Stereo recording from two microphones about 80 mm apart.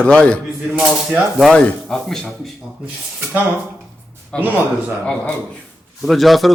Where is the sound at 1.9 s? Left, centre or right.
Centre.